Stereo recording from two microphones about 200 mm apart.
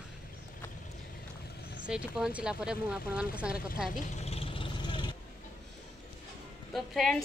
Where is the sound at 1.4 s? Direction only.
55° left (ahead or behind).